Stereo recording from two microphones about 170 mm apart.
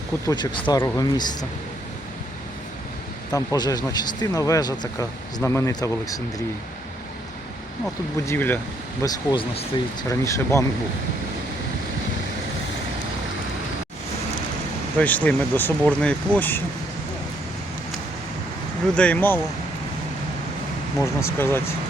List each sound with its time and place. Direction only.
0.3 s speech: 30° left (ahead or behind)
0.8 s speech: 15° left (ahead or behind)
1.1 s speech: 25° left (ahead or behind)
3.3 s speech: 20° left (ahead or behind)
8.3 s speech: 10° left (ahead or behind)
9.0 s speech: 25° left (ahead or behind)
10.1 s speech: 20° left (ahead or behind)
14.9 s speech: 10° left (ahead or behind)
18.9 s speech: 10° left (ahead or behind)
21.2 s speech: 15° left (ahead or behind)